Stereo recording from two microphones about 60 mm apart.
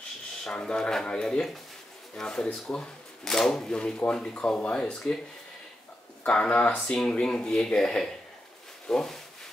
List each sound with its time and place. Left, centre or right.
0.4 s speech: centre
6.2 s speech: centre